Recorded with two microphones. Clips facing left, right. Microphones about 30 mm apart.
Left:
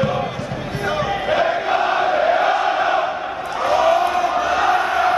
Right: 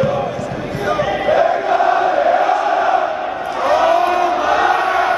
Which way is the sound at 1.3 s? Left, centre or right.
Centre.